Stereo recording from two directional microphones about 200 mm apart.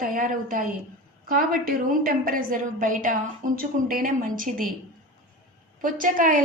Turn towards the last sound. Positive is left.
turn(degrees=-40)  # may be behind; listen again after turning